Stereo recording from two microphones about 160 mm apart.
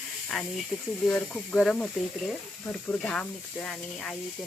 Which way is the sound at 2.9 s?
5° left (ahead or behind).